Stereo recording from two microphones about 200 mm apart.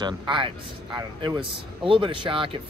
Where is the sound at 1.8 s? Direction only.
25° right (ahead or behind).